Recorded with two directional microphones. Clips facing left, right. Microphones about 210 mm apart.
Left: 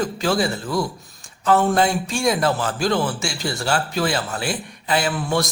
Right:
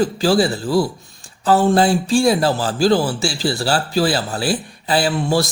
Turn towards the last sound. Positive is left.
turn(degrees=-30)  # may be behind; listen again after turning